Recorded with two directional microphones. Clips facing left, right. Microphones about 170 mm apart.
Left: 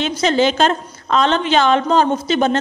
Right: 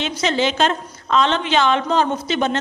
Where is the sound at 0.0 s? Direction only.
40° left (ahead or behind).